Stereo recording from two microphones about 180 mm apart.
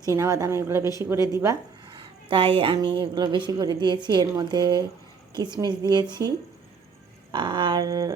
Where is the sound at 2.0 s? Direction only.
30° right (ahead or behind).